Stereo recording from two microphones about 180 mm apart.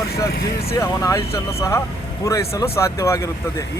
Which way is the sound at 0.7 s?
15° left (ahead or behind).